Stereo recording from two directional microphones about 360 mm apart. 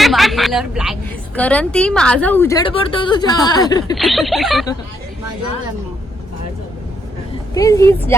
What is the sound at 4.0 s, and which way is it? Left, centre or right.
Speech, centre.